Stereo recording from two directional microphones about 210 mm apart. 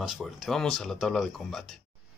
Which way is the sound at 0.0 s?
Centre (ahead or behind).